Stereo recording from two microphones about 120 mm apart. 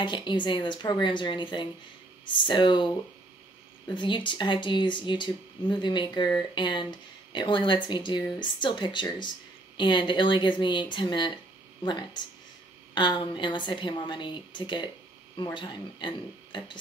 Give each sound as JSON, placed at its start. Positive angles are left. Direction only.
{"t": 0.0, "sound": "speech", "side_deg": 40}
{"t": 3.9, "sound": "speech", "side_deg": 40}